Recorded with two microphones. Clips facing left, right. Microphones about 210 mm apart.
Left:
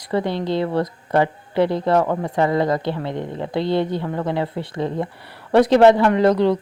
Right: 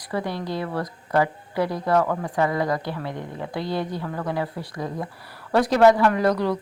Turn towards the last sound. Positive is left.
turn(degrees=25)  # may be behind; listen again after turning